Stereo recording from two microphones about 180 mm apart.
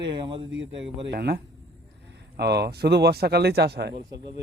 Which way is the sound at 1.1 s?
60° right (ahead or behind).